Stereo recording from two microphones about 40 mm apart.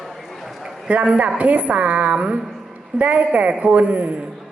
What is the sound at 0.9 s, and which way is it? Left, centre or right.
A woman's voice, right.